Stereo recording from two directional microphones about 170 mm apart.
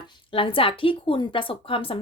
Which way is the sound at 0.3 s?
30° left (ahead or behind).